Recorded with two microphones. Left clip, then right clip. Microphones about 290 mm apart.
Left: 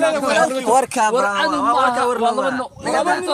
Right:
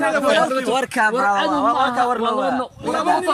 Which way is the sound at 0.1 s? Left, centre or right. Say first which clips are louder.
Even; left.